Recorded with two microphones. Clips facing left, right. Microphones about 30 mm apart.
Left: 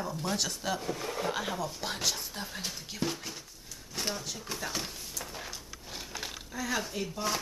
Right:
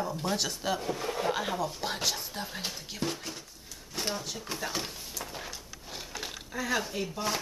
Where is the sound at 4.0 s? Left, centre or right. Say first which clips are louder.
Right 1 dB; centre.